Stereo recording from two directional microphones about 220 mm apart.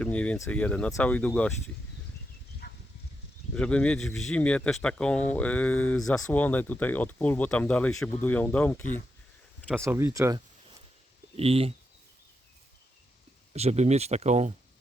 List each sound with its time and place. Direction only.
0.0 s speech: 5° left (ahead or behind)
2.6 s a sound: 50° left (ahead or behind)
3.5 s speech: 5° left (ahead or behind)
9.8 s speech: 10° right (ahead or behind)
11.3 s speech: 25° right (ahead or behind)
13.5 s speech: 30° right (ahead or behind)